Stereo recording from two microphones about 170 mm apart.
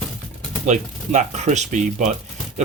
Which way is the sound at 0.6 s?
45° right (ahead or behind).